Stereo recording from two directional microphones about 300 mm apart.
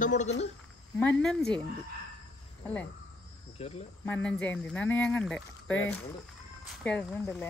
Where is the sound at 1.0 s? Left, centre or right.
Centre.